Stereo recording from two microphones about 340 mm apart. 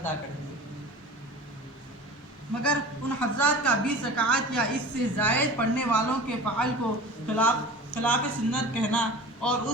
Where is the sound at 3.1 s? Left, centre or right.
Centre.